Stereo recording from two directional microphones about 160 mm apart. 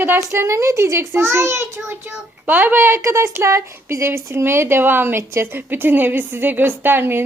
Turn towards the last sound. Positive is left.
turn(degrees=-15)  # may be behind; listen again after turning